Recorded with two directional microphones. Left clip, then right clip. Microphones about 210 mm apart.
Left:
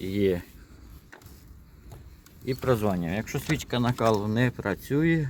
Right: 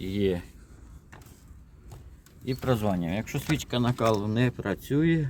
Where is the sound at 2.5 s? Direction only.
5° left (ahead or behind).